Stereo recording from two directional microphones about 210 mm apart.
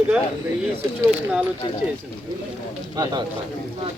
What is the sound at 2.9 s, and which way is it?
Speech, 20° right (ahead or behind).